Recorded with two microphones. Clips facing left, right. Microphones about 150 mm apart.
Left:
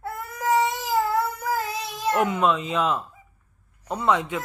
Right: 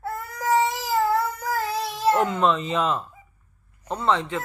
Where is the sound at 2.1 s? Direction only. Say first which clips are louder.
Even; 10° left (ahead or behind).